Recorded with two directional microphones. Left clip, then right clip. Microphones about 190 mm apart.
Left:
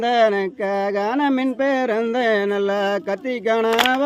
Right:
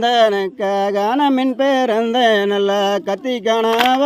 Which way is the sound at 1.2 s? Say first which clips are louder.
Right 4 dB; 35° right (ahead or behind).